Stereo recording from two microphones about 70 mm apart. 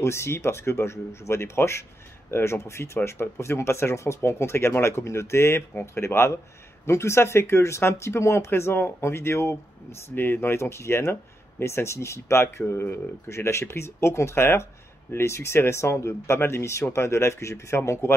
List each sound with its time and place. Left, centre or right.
0.0 s speech: left